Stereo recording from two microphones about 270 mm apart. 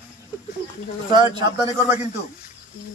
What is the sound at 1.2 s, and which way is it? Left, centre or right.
Speech, centre.